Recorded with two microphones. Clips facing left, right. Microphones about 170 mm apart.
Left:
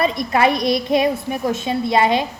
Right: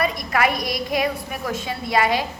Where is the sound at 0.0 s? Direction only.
25° left (ahead or behind).